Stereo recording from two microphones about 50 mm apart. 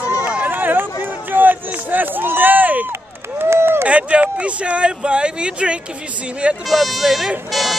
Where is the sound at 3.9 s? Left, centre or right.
Right.